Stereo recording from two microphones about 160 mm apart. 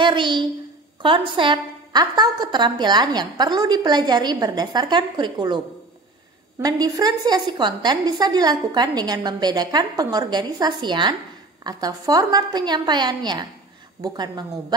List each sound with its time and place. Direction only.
0.0 s a woman's voice: 30° right (ahead or behind)
6.6 s a woman's voice: 25° right (ahead or behind)